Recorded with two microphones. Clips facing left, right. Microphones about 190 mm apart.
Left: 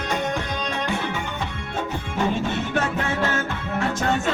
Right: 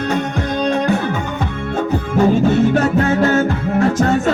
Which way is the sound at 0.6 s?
45° right (ahead or behind).